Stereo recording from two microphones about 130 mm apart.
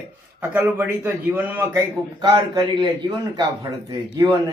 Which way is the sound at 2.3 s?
30° right (ahead or behind).